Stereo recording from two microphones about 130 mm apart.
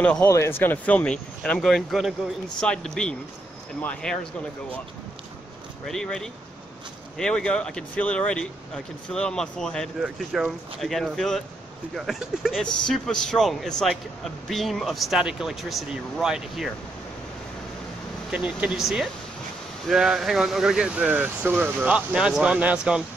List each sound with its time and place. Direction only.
0.0 s a man's voice: 10° left (ahead or behind)
5.9 s a man's voice: 5° left (ahead or behind)
18.3 s a man's voice: 10° right (ahead or behind)